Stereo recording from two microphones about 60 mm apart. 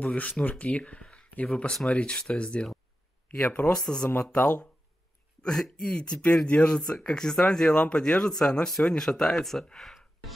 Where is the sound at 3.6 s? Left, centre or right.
Centre.